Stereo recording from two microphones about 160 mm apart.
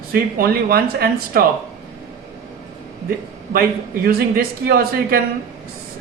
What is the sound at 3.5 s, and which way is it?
Speech, 70° right (ahead or behind).